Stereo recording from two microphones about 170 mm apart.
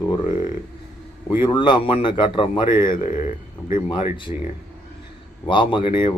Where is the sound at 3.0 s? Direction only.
45° left (ahead or behind).